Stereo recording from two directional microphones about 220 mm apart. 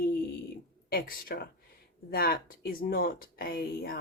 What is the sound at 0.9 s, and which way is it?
Speech, 40° left (ahead or behind).